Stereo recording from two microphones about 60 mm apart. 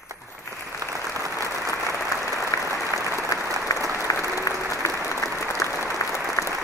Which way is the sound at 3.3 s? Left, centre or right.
Left.